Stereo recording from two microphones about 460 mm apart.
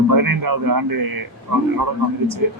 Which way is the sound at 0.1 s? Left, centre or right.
Right.